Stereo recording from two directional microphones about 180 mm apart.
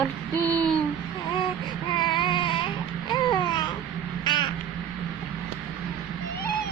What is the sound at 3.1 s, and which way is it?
Babbling, 25° left (ahead or behind).